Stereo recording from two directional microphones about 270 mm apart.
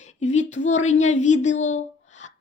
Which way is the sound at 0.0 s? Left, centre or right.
Left.